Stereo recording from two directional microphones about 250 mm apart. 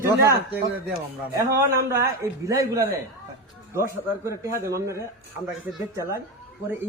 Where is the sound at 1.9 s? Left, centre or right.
Centre.